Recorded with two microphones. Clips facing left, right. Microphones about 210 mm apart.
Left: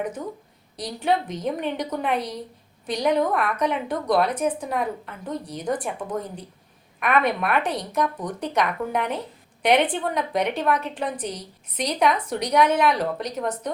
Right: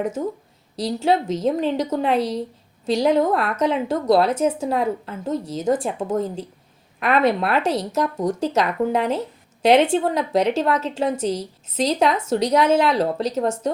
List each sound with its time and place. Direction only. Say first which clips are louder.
0.8 s a woman's voice: right 4 dB; 25° right (ahead or behind)